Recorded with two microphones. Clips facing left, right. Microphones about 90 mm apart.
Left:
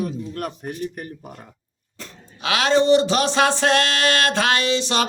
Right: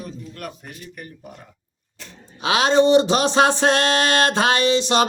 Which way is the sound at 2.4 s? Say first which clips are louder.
Right 2 dB; 25° right (ahead or behind).